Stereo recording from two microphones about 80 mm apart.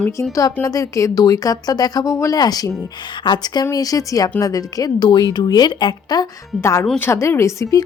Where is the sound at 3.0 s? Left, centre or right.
Left.